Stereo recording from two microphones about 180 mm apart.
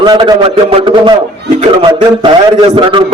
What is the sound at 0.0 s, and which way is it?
A man's voice, 25° right (ahead or behind).